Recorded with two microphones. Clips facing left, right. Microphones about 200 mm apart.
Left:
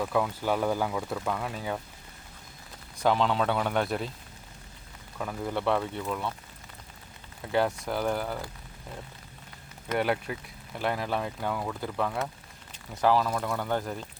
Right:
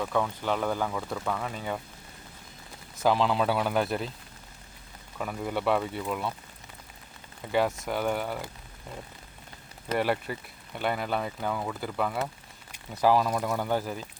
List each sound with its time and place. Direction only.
0.0 s speech: 5° left (ahead or behind)
3.0 s speech: 5° right (ahead or behind)
5.1 s speech: 5° right (ahead or behind)
7.5 s speech: centre (ahead or behind)
10.0 s speech: centre (ahead or behind)